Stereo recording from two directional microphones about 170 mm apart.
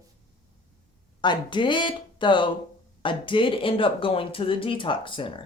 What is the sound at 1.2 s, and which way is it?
Speech, 25° left (ahead or behind).